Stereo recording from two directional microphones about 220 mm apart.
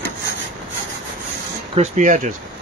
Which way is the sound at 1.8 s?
35° right (ahead or behind).